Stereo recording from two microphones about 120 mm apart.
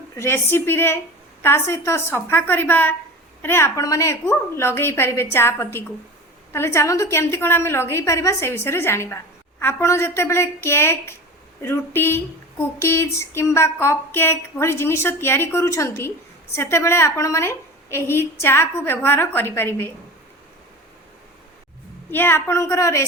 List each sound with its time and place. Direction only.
0.2 s speech: 20° left (ahead or behind)
22.1 s speech: 20° left (ahead or behind)